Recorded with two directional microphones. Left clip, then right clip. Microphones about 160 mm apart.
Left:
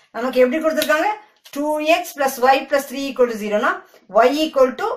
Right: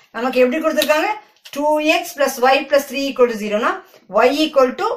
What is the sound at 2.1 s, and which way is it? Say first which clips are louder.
Speech: right 1 dB; 15° right (ahead or behind).